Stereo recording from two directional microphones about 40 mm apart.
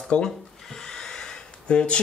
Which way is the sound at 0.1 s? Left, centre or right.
Left.